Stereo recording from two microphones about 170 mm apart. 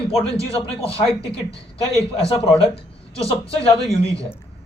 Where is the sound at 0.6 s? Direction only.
35° left (ahead or behind).